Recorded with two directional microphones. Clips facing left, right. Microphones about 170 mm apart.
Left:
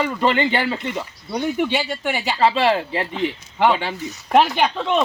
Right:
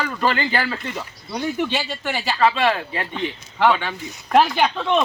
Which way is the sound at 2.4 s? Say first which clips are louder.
Left 2 dB; 30° left (ahead or behind).